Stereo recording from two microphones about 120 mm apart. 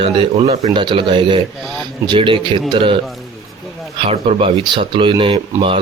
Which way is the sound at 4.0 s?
55° right (ahead or behind).